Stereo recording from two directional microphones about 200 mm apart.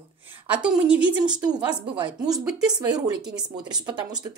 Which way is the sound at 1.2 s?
20° right (ahead or behind).